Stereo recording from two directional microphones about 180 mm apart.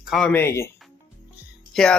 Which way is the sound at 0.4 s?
15° left (ahead or behind).